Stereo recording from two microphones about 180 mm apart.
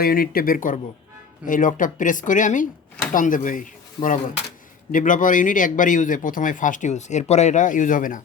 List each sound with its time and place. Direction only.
0.0 s a man's voice: 55° left (ahead or behind)